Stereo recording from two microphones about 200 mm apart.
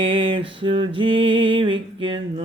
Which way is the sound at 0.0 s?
25° right (ahead or behind).